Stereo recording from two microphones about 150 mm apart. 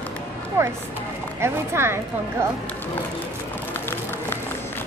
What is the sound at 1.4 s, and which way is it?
Speech, 15° right (ahead or behind).